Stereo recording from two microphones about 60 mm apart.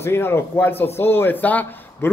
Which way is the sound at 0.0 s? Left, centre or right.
Left.